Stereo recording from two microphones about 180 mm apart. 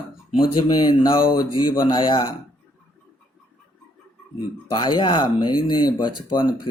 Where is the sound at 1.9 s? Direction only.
25° left (ahead or behind).